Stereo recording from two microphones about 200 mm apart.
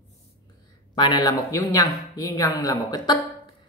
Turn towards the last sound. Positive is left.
turn(degrees=20)  # may be behind; listen again after turning